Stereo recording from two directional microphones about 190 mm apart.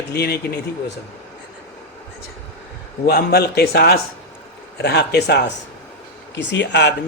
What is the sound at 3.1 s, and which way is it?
Speech, 55° left (ahead or behind).